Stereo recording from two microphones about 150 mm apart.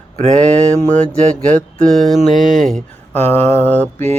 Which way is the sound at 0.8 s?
10° left (ahead or behind).